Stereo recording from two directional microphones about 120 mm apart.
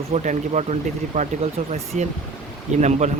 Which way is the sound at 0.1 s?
75° right (ahead or behind).